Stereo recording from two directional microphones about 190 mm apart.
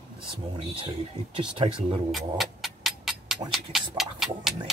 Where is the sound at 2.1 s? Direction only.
Centre (ahead or behind).